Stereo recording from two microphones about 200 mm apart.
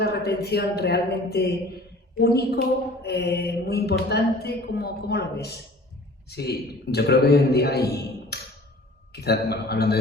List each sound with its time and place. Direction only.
0.0 s speech: 55° left (ahead or behind)